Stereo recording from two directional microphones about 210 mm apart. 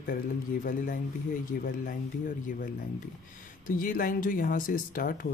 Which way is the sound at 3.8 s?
40° left (ahead or behind).